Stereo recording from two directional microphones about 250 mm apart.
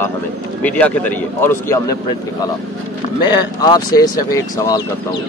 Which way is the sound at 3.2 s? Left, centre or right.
Centre.